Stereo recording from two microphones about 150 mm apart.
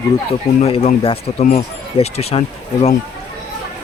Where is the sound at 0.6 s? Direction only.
40° left (ahead or behind).